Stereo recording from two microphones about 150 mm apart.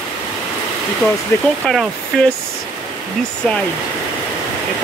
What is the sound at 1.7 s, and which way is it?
Speech, centre (ahead or behind).